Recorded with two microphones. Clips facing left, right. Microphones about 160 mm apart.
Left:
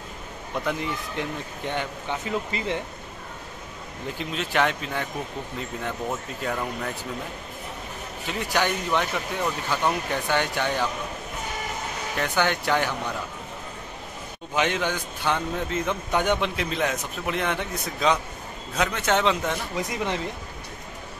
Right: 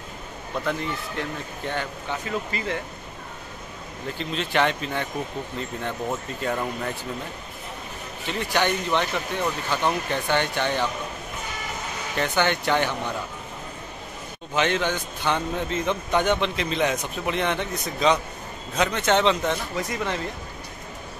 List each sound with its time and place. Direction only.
0.7 s speech: 15° left (ahead or behind)
4.2 s a man's voice: 5° left (ahead or behind)
8.3 s a man's voice: 5° left (ahead or behind)
12.2 s a man's voice: 5° left (ahead or behind)
14.5 s a man's voice: 10° left (ahead or behind)